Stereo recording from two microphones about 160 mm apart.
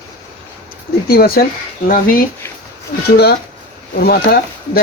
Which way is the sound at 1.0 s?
70° left (ahead or behind).